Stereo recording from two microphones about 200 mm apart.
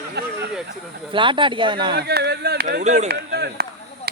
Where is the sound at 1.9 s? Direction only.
55° right (ahead or behind).